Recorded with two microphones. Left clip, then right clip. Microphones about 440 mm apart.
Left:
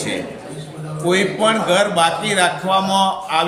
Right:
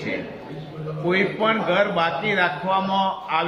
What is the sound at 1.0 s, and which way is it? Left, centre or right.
A man's voice, right.